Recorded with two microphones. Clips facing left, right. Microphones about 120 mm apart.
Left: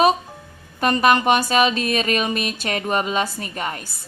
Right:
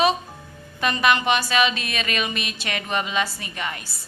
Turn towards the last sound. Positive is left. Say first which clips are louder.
# left 3 dB
turn(degrees=40)  # may be behind; listen again after turning